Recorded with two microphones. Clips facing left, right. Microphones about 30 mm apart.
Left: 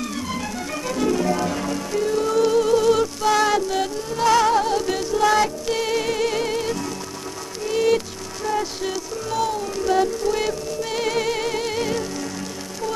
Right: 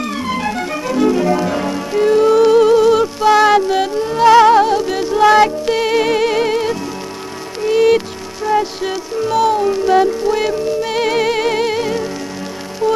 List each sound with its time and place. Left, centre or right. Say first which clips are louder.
0.0 s music: right 8 dB; right
0.8 s music: right 7 dB; right
4.7 s music: right 6 dB; right
8.5 s speech: right 8 dB; right
9.8 s music: right 7 dB; right
11.8 s music: right 5 dB; centre